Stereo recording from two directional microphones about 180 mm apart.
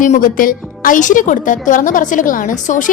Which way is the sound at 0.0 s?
45° left (ahead or behind).